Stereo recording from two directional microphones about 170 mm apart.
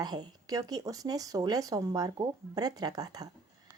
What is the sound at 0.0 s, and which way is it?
Speech, 25° right (ahead or behind).